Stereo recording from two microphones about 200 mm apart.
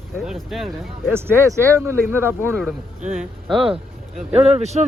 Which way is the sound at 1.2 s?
10° right (ahead or behind).